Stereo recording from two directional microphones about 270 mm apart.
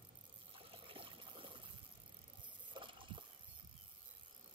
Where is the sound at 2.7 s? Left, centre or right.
Centre.